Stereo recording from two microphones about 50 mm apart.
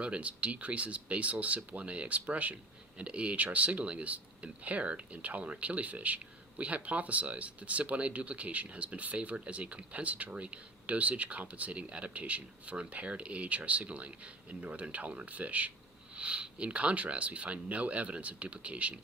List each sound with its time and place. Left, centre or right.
0.0 s speech: right